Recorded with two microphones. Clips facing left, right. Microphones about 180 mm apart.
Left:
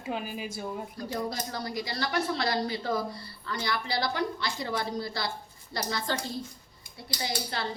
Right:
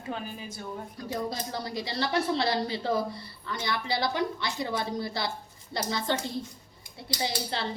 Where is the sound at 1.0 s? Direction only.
25° right (ahead or behind).